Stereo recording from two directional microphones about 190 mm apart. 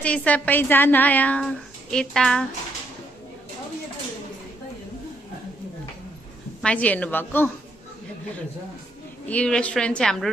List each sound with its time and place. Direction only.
0.0 s speech: 5° left (ahead or behind)
6.6 s speech: 5° left (ahead or behind)
9.3 s a woman's voice: 5° left (ahead or behind)